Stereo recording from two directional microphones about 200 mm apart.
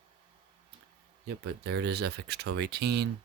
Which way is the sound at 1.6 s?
55° right (ahead or behind).